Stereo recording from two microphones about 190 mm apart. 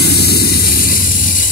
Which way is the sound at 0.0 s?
55° left (ahead or behind).